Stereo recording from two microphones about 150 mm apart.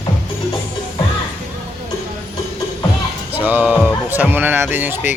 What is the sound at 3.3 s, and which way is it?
Music, 10° right (ahead or behind).